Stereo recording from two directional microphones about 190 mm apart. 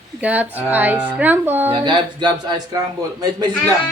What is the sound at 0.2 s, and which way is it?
A woman's voice, 10° right (ahead or behind).